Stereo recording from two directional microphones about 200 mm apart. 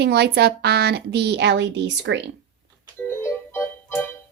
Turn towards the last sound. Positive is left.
turn(degrees=10)  # may be behind; listen again after turning